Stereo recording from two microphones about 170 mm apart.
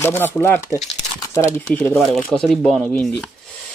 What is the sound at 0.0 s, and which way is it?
Speech, 15° left (ahead or behind).